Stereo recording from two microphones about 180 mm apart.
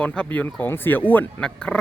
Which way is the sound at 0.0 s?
5° left (ahead or behind).